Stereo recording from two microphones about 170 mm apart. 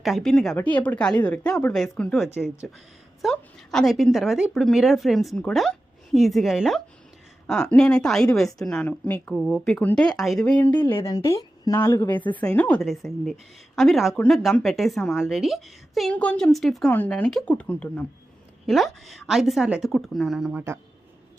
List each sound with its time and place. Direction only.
0.0 s a woman's voice: centre (ahead or behind)
9.3 s a woman's voice: centre (ahead or behind)